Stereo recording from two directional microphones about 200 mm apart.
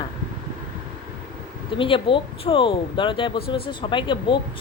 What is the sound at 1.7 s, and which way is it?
Speech, 25° left (ahead or behind).